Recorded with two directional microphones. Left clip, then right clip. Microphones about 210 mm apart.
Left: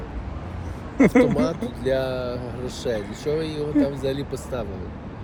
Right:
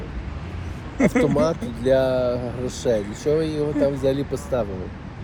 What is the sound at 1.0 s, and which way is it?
Speech, 30° left (ahead or behind).